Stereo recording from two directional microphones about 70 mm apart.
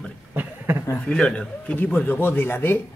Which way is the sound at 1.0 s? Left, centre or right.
Centre.